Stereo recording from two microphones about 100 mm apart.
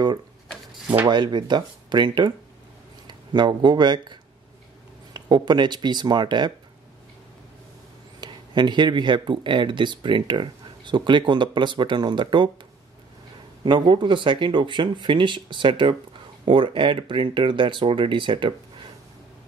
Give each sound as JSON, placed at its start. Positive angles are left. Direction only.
{"t": 1.0, "sound": "speech", "side_deg": -50}
{"t": 8.2, "sound": "speech", "side_deg": -50}
{"t": 13.7, "sound": "speech", "side_deg": -50}